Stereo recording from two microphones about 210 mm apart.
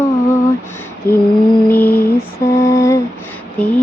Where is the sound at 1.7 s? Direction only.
10° left (ahead or behind).